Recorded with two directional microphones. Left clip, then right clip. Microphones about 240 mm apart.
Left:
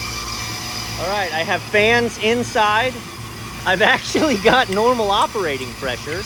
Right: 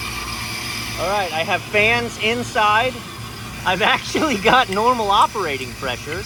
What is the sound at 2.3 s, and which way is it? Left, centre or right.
Speech, centre.